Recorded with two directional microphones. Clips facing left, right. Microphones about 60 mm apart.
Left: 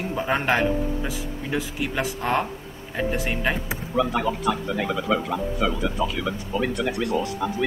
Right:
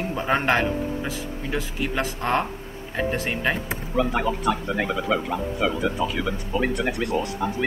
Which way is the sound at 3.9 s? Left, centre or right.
Right.